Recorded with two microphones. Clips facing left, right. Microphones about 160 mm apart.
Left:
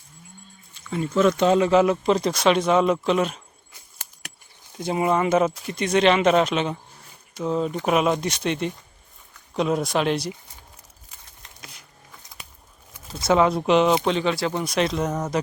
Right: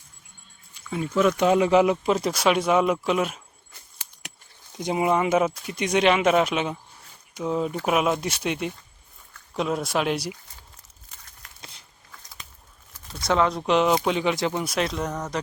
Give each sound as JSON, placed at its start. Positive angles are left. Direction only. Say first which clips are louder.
{"t": 0.7, "sound": "speech", "louder": "left 2 dB", "side_deg": -10}
{"t": 4.2, "sound": "a sound", "louder": "right 1 dB", "side_deg": -20}
{"t": 4.8, "sound": "speech", "louder": "left 1 dB", "side_deg": -15}
{"t": 13.2, "sound": "speech", "louder": "left 3 dB", "side_deg": 10}
{"t": 14.0, "sound": "speech", "louder": "left 1 dB", "side_deg": -10}
{"t": 14.6, "sound": "speech", "louder": "left 3 dB", "side_deg": -5}